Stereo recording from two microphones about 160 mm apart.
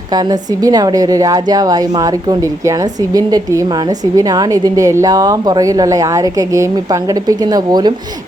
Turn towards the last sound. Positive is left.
turn(degrees=-25)  # may be behind; listen again after turning